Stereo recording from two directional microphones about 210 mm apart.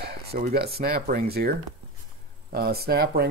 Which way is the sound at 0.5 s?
50° right (ahead or behind).